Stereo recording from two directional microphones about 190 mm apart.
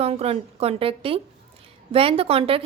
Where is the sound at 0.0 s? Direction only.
30° right (ahead or behind).